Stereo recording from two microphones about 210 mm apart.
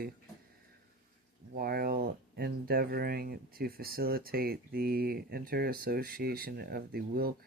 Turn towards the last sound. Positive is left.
turn(degrees=-45)  # may be behind; listen again after turning